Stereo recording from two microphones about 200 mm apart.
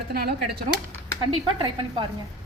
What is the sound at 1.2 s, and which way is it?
Speech, 25° right (ahead or behind).